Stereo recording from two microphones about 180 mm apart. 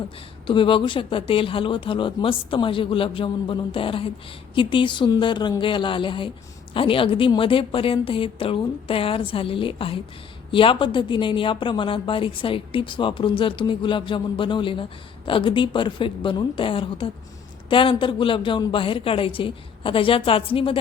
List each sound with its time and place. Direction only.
0.4 s a woman's voice: 30° left (ahead or behind)